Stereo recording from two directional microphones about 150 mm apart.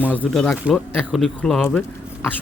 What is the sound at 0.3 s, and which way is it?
A man's voice, 5° left (ahead or behind).